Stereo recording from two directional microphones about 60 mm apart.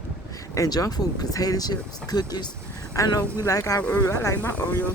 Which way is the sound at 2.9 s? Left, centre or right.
Left.